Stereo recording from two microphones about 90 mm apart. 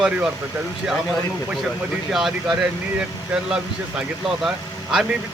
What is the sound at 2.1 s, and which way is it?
Speech, 5° right (ahead or behind).